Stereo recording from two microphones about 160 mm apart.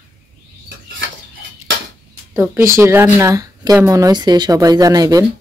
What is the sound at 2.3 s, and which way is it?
Speech, 15° right (ahead or behind).